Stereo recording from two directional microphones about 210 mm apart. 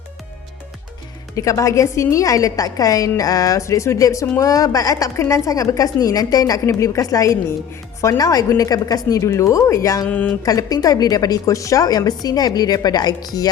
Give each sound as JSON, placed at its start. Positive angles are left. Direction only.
{"t": 1.4, "sound": "a woman's voice", "side_deg": 15}